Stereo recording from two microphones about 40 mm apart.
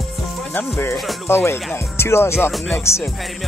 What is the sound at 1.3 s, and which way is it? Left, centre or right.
Speech, left.